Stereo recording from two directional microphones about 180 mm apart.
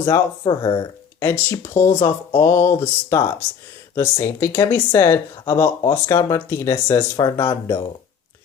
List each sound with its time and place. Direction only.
0.0 s speech: 15° left (ahead or behind)
0.5 s speech: 25° left (ahead or behind)
1.2 s speech: 15° left (ahead or behind)